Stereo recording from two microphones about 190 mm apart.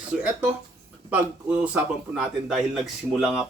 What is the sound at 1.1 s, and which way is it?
A man's voice, 5° right (ahead or behind).